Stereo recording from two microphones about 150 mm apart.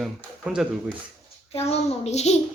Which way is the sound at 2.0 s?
45° left (ahead or behind).